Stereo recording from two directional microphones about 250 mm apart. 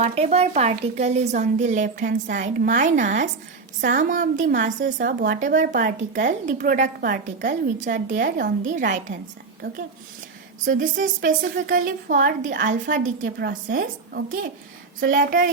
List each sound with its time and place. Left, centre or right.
0.0 s a woman's voice: right